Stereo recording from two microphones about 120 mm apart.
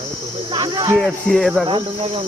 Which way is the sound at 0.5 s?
35° right (ahead or behind).